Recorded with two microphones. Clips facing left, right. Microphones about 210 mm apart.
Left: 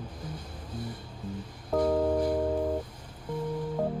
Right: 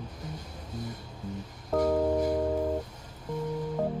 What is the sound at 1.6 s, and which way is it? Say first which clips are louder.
Music: even; 5° right (ahead or behind).